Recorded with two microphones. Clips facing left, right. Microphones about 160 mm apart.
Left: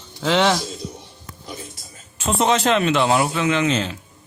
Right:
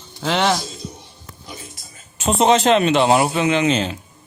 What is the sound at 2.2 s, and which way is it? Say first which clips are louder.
A man's voice: right 4 dB; 25° right (ahead or behind).